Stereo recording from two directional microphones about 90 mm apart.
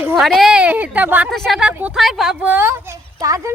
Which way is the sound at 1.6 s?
15° right (ahead or behind).